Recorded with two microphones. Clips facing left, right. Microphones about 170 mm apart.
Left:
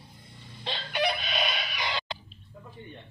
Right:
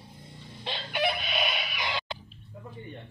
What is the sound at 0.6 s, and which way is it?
Chicken, 15° right (ahead or behind).